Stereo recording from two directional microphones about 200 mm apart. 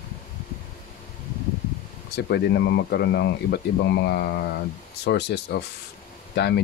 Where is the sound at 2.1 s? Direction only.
55° left (ahead or behind).